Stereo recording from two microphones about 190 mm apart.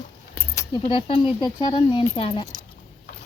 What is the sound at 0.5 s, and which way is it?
Keys jangling, 15° left (ahead or behind).